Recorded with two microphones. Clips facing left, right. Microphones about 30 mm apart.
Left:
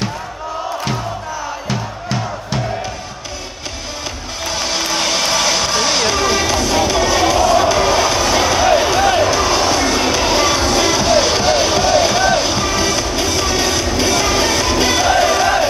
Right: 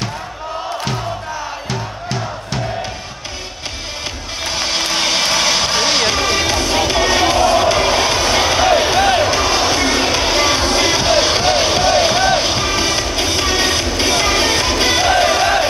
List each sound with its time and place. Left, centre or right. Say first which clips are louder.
1.7 s music: left 2 dB; centre
4.5 s music: even; right